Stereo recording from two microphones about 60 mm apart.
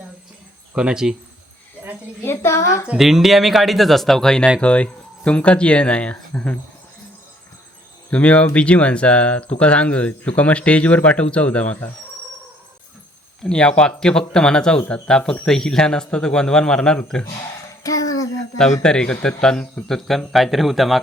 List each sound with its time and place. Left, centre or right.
0.7 s speech: centre
2.2 s speech: left
3.0 s speech: centre
4.6 s speech: left
8.1 s speech: left
13.4 s speech: centre
17.8 s a sound: left
18.5 s speech: centre